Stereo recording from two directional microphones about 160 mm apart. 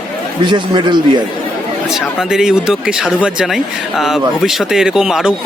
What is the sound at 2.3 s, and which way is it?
Speech, 5° right (ahead or behind).